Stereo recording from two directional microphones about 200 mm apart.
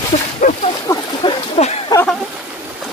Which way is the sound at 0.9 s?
15° left (ahead or behind).